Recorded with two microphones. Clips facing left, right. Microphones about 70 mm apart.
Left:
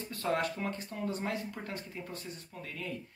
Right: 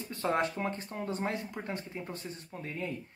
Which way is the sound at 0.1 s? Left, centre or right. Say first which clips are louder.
Right 2 dB; right.